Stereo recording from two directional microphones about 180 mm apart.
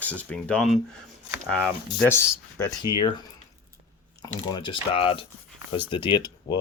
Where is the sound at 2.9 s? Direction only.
20° right (ahead or behind).